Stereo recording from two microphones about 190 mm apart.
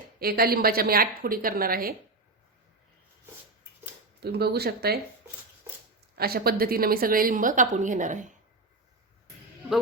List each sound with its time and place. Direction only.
0.2 s a woman's voice: 55° right (ahead or behind)
4.2 s speech: 60° right (ahead or behind)
6.1 s a woman's voice: 55° right (ahead or behind)